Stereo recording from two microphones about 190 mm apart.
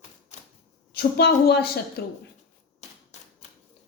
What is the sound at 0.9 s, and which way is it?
A woman's voice, 55° left (ahead or behind).